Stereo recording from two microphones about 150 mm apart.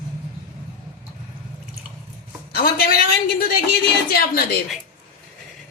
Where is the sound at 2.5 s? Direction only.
90° left.